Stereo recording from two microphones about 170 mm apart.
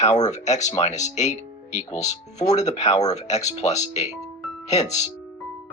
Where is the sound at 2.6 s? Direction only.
40° left (ahead or behind).